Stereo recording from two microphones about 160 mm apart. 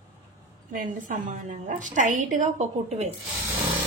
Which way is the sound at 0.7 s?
55° right (ahead or behind).